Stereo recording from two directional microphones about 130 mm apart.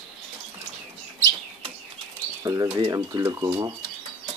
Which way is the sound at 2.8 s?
25° right (ahead or behind).